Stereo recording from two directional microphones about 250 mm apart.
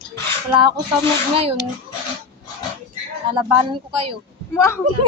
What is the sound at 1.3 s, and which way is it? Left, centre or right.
Speech, right.